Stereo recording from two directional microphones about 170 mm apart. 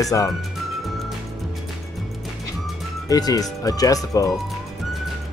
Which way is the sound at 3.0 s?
20° left (ahead or behind).